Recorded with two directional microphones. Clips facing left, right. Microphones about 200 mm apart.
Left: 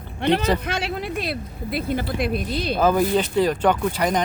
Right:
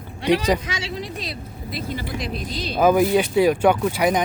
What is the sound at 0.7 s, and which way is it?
Speech, 55° left (ahead or behind).